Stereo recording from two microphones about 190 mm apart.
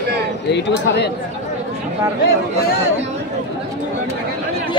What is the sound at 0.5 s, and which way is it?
Speech, 60° left (ahead or behind).